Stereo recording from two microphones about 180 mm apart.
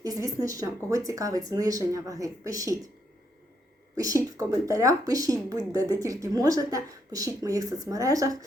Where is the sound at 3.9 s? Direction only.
20° right (ahead or behind).